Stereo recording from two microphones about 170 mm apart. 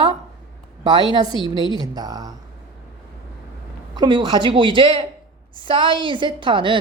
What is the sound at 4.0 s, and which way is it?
Speech, 25° right (ahead or behind).